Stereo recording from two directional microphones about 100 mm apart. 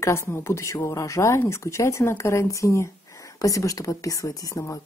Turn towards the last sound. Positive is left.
turn(degrees=35)  # may be behind; listen again after turning